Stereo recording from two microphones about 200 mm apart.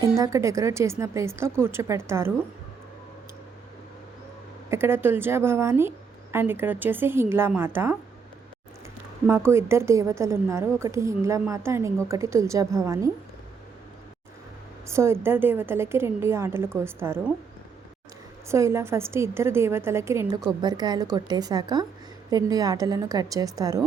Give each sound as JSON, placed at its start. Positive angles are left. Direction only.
{"t": 0.0, "sound": "a woman's voice", "side_deg": -15}
{"t": 4.7, "sound": "a woman's voice", "side_deg": -10}
{"t": 9.2, "sound": "a woman's voice", "side_deg": -10}
{"t": 14.8, "sound": "a woman's voice", "side_deg": -15}
{"t": 18.4, "sound": "a woman's voice", "side_deg": -15}